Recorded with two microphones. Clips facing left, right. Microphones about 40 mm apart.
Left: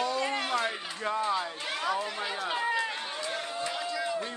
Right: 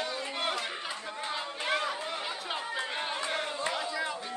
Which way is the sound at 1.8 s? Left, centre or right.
Left.